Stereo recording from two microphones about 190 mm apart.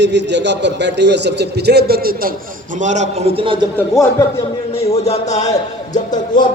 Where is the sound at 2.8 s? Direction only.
40° right (ahead or behind).